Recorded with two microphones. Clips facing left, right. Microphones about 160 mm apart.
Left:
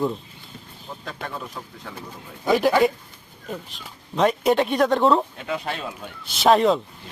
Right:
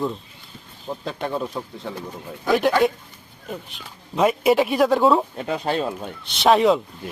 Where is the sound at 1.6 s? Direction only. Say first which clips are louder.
Right 7 dB; 20° right (ahead or behind).